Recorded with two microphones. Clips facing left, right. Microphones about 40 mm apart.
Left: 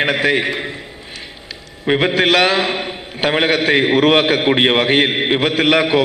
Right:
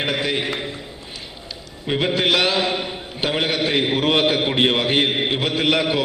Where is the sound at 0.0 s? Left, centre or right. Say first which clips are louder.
Left 6 dB; left.